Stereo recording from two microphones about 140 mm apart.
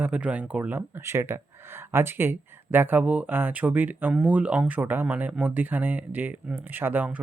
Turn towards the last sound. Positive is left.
turn(degrees=-15)  # may be behind; listen again after turning